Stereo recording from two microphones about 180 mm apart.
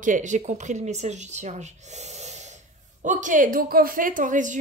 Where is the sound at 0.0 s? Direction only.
45° right (ahead or behind).